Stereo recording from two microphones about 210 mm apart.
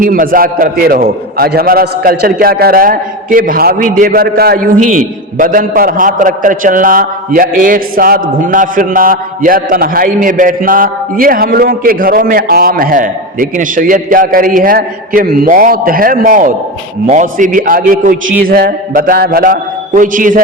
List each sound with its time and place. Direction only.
0.0 s a man's voice: 40° right (ahead or behind)